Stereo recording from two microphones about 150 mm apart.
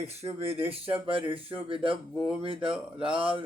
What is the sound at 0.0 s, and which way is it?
A man's voice, 40° right (ahead or behind).